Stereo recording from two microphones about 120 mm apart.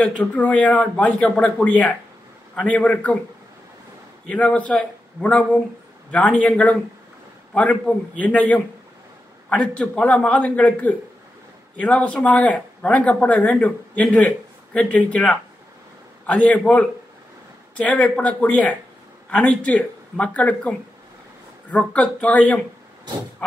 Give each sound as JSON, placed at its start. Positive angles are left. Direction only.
{"t": 0.0, "sound": "speech", "side_deg": 10}
{"t": 4.3, "sound": "speech", "side_deg": 10}